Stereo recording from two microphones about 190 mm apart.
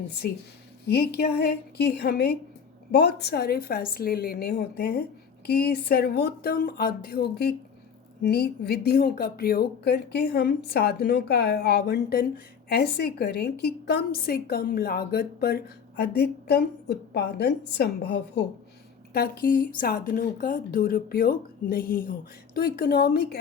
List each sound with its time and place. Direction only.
0.2 s a woman's voice: 55° left (ahead or behind)